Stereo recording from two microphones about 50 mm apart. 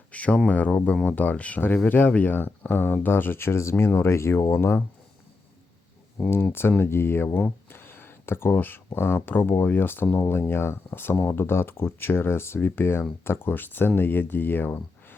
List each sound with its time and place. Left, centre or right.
0.1 s speech: left
6.4 s speech: left